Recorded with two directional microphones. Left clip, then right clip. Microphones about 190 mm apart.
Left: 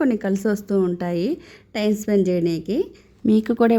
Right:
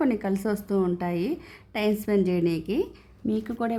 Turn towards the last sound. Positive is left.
turn(degrees=30)  # may be behind; listen again after turning